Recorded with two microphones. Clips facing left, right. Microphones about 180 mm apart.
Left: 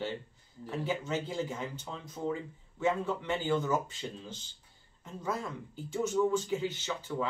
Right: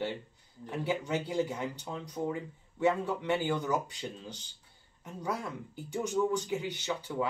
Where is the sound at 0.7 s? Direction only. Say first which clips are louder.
Right 1 dB; 15° right (ahead or behind).